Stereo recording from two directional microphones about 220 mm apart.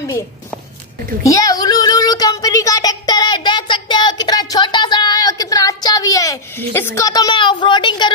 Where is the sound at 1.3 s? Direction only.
15° left (ahead or behind).